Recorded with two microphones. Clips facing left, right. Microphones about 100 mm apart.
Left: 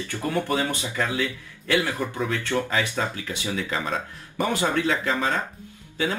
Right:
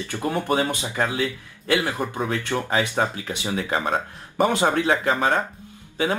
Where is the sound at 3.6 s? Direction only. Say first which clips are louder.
Right 5 dB; 45° right (ahead or behind).